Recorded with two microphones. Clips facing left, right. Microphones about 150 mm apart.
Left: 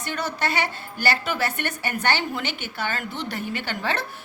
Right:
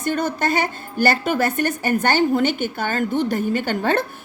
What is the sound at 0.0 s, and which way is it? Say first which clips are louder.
A woman's voice: right 6 dB; 50° right (ahead or behind).